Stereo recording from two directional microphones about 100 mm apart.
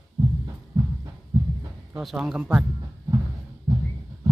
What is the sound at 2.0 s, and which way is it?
Speech, 5° right (ahead or behind).